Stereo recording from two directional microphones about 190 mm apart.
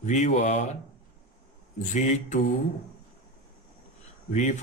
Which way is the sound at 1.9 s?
40° left (ahead or behind).